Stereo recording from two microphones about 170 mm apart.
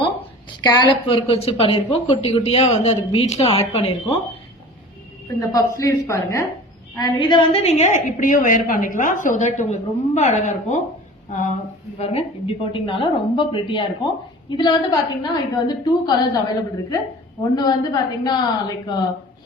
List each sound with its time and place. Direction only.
0.6 s a woman's voice: 30° left (ahead or behind)
5.4 s a woman's voice: 20° left (ahead or behind); by 11.5 s 45° left (ahead or behind)
11.9 s a woman's voice: 35° left (ahead or behind)